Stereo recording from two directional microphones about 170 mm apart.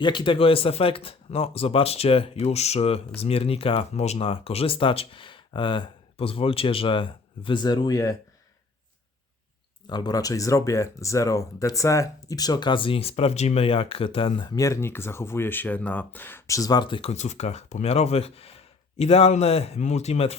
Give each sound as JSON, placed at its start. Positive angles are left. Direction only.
{"t": 0.0, "sound": "speech", "side_deg": 30}
{"t": 9.8, "sound": "speech", "side_deg": 25}